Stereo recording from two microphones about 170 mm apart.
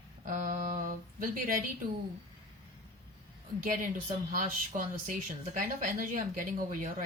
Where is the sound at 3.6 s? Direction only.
50° right (ahead or behind).